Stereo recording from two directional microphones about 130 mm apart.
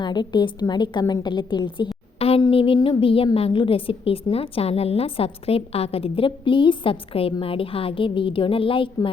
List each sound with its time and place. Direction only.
0.0 s a woman's voice: 35° left (ahead or behind)
2.1 s a sound: 50° left (ahead or behind)
3.3 s a woman's voice: 45° left (ahead or behind)